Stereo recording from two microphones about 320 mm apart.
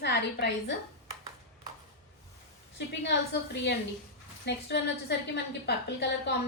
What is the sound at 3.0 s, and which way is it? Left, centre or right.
A woman's voice, left.